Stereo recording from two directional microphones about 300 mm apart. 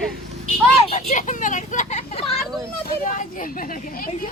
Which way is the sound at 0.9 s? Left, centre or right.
Left.